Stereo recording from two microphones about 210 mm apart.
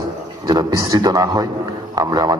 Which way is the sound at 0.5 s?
15° right (ahead or behind).